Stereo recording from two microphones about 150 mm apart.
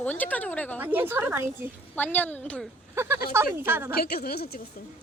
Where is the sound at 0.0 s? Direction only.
10° left (ahead or behind).